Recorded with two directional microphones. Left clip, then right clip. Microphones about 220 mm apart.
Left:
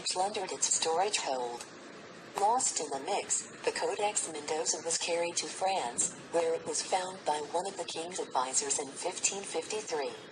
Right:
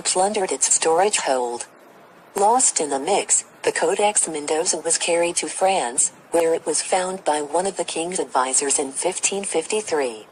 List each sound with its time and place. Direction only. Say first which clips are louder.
0.1 s a woman's voice: right 13 dB; 50° right (ahead or behind)
6.9 s a woman's voice: right 11 dB; 45° right (ahead or behind)